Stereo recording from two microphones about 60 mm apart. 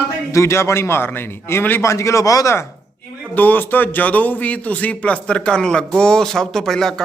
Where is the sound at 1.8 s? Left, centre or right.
Left.